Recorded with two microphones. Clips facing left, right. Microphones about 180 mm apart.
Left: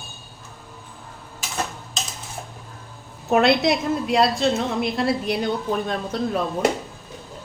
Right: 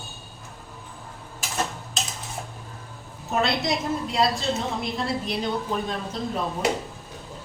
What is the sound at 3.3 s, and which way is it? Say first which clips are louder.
A woman's voice: left 7 dB; 70° left (ahead or behind).